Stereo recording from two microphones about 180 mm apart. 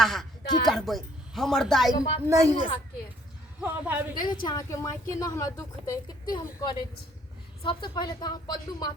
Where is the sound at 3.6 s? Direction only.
10° right (ahead or behind).